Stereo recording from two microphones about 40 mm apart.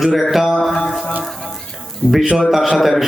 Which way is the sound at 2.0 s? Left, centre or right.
Left.